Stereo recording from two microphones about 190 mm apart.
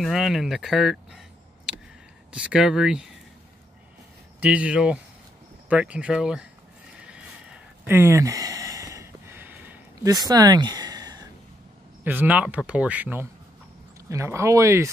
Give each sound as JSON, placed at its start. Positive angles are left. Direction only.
{"t": 0.0, "sound": "speech", "side_deg": 0}
{"t": 1.7, "sound": "a sound", "side_deg": -5}
{"t": 2.3, "sound": "speech", "side_deg": -5}
{"t": 4.4, "sound": "speech", "side_deg": -5}
{"t": 7.0, "sound": "a sound", "side_deg": -5}
{"t": 10.1, "sound": "speech", "side_deg": -20}
{"t": 12.0, "sound": "speech", "side_deg": -10}